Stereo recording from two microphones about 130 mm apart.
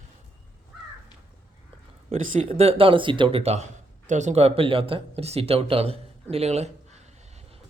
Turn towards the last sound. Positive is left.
turn(degrees=-55)  # may be behind; listen again after turning